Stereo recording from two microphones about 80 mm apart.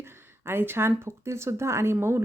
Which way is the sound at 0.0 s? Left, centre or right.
Right.